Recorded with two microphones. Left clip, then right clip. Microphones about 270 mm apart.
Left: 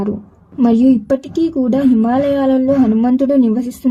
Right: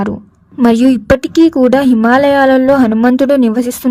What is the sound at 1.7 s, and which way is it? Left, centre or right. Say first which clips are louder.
Speech: right 5 dB; right.